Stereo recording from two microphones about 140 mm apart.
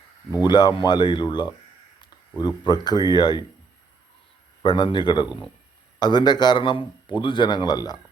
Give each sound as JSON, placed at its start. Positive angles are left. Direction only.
{"t": 0.4, "sound": "a man's voice", "side_deg": 30}
{"t": 2.6, "sound": "a man's voice", "side_deg": 30}
{"t": 4.6, "sound": "a man's voice", "side_deg": 35}